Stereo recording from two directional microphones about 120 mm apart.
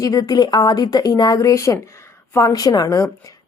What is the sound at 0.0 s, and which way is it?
A woman's voice, 30° left (ahead or behind).